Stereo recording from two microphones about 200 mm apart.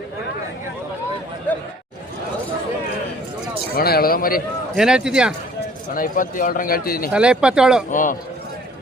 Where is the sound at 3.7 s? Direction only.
50° left (ahead or behind).